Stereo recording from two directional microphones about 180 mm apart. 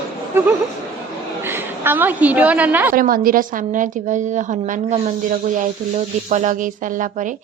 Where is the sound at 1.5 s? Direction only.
10° right (ahead or behind).